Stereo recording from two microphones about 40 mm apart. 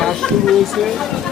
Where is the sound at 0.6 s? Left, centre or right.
Centre.